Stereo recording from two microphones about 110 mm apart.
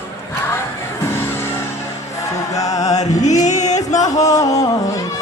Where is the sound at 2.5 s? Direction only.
35° left (ahead or behind).